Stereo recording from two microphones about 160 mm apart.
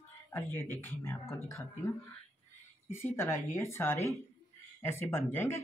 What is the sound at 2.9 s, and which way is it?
Speech, 15° left (ahead or behind).